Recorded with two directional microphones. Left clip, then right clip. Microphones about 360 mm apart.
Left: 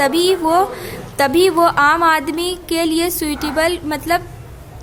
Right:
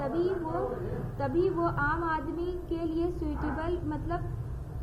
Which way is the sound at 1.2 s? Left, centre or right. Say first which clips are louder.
Left 16 dB; left.